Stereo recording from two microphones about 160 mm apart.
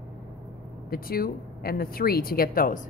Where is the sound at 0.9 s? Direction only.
65° left (ahead or behind).